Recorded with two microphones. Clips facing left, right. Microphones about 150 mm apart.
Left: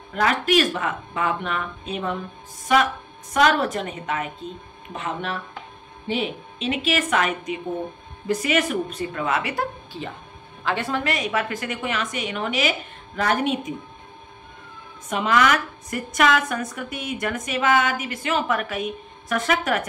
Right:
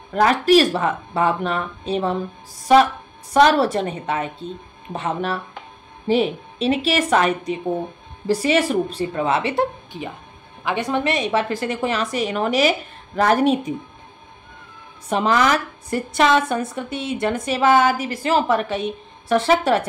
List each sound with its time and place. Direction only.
0.1 s a woman's voice: 35° right (ahead or behind)
15.0 s a woman's voice: 35° right (ahead or behind)